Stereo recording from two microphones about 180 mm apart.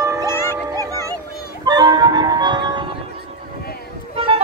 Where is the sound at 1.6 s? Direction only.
25° right (ahead or behind).